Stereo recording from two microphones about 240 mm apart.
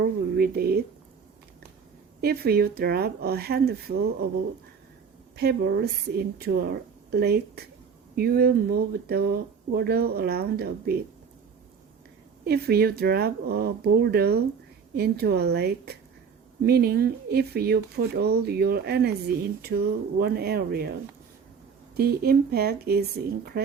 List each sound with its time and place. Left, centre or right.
0.3 s speech: right
2.2 s speech: right
5.4 s a woman's voice: right
12.5 s a woman's voice: right
21.9 s speech: right